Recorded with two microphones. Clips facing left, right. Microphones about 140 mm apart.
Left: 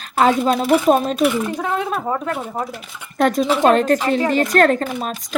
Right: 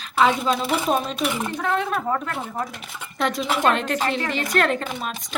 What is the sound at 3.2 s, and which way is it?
A woman's voice, 45° left (ahead or behind).